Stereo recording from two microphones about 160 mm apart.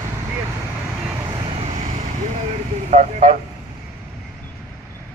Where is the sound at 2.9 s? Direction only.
45° right (ahead or behind).